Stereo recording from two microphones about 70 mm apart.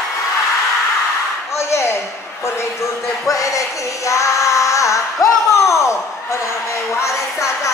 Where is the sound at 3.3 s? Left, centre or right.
Left.